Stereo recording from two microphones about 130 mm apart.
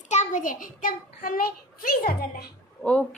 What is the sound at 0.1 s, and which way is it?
A child's voice, 65° left (ahead or behind).